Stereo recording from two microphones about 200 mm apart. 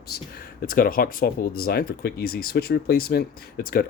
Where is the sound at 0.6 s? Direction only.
45° left (ahead or behind).